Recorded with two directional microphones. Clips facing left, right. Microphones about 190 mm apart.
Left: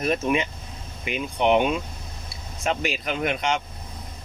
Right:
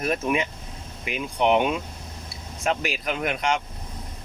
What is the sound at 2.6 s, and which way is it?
Speech, 5° right (ahead or behind).